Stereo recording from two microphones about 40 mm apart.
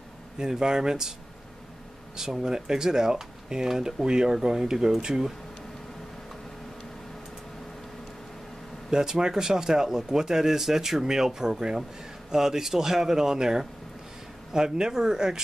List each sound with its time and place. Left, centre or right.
0.4 s speech: centre
2.1 s speech: centre
8.9 s speech: centre